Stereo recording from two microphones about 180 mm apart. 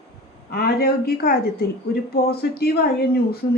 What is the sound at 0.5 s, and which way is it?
A woman's voice, 60° left (ahead or behind).